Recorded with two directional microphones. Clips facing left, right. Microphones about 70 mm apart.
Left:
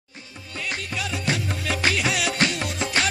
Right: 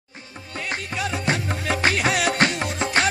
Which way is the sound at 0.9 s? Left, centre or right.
Right.